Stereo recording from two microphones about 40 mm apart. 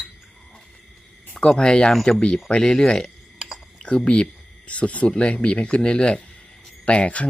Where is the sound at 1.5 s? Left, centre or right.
Centre.